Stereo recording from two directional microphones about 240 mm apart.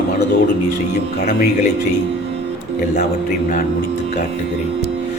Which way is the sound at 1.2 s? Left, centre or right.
Left.